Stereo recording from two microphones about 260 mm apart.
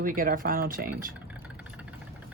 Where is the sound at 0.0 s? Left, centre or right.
Right.